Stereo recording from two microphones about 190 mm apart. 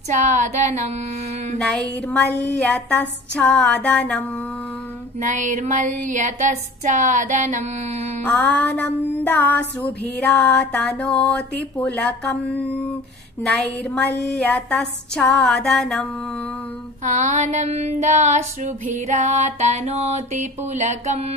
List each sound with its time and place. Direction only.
0.1 s female singing: 40° right (ahead or behind)
1.6 s music: 5° left (ahead or behind)
5.2 s female singing: 40° right (ahead or behind)
8.2 s music: 10° left (ahead or behind)
14.1 s a sound: 10° left (ahead or behind)
17.0 s female singing: 40° right (ahead or behind)